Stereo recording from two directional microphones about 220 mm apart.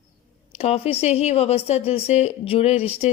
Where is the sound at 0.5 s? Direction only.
25° left (ahead or behind).